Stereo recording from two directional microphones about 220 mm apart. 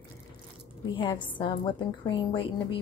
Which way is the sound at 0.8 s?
20° left (ahead or behind).